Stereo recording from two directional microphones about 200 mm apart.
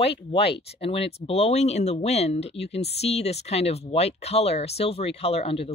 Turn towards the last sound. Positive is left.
turn(degrees=30)  # may be behind; listen again after turning